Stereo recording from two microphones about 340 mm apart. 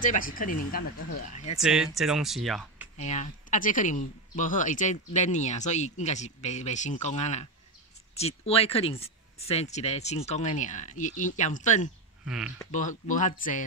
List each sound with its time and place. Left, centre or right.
0.0 s speech: left
1.6 s speech: centre
3.0 s speech: centre
12.3 s speech: centre
12.7 s speech: left